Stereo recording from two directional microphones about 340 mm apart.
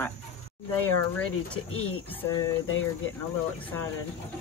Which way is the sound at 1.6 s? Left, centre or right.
Left.